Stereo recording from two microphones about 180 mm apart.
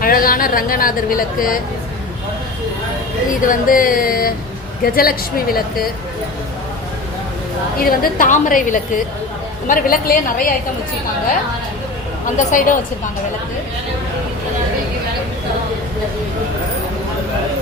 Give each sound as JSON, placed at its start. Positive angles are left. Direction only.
{"t": 0.0, "sound": "speech", "side_deg": 55}
{"t": 3.4, "sound": "a woman's voice", "side_deg": 50}
{"t": 7.8, "sound": "a woman's voice", "side_deg": 55}
{"t": 12.5, "sound": "a woman's voice", "side_deg": 45}